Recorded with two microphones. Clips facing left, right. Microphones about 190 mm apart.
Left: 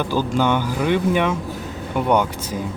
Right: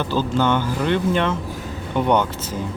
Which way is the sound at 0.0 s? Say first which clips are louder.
Even; 10° left (ahead or behind).